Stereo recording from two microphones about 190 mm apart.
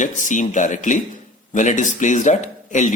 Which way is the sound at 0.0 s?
40° left (ahead or behind).